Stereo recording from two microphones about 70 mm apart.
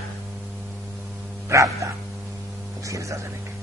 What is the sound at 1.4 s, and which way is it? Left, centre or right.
Speech, right.